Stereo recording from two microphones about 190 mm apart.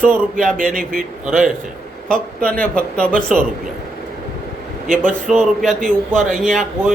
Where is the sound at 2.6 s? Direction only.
5° left (ahead or behind).